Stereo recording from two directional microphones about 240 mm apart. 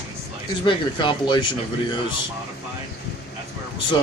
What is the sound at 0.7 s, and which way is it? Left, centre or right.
Speech, centre.